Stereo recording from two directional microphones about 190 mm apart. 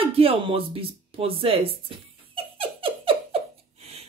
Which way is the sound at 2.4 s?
30° right (ahead or behind).